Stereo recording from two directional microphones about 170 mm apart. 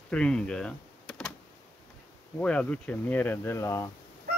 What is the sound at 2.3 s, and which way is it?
Speech, 5° left (ahead or behind).